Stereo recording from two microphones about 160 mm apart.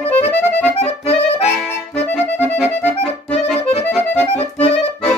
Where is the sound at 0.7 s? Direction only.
45° left (ahead or behind).